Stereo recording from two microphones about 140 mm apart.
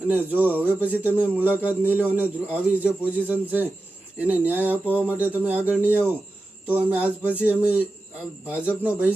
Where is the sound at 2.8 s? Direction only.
10° right (ahead or behind).